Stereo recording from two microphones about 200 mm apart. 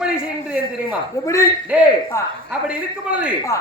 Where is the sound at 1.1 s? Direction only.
15° left (ahead or behind).